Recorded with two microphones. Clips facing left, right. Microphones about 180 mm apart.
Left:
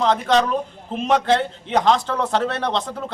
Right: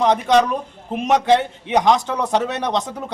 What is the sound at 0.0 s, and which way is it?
A man's voice, 15° right (ahead or behind).